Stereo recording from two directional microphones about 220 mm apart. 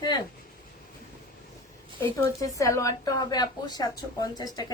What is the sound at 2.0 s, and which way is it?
A woman's voice, 15° left (ahead or behind).